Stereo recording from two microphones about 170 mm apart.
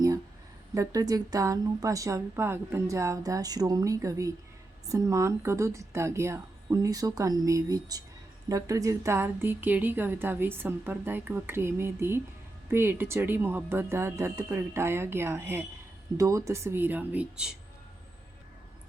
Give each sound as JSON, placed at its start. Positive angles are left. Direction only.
{"t": 0.7, "sound": "a woman's voice", "side_deg": -20}